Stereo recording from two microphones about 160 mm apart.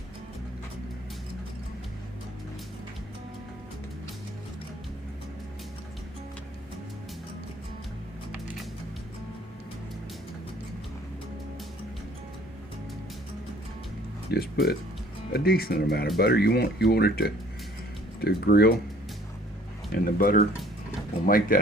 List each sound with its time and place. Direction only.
14.3 s speech: 80° left
19.9 s speech: 65° left (ahead or behind)